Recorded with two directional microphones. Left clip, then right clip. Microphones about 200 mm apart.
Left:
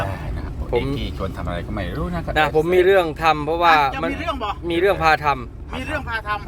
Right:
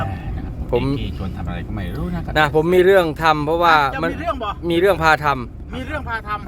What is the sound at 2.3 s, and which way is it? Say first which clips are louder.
Speech: right 2 dB; 20° right (ahead or behind).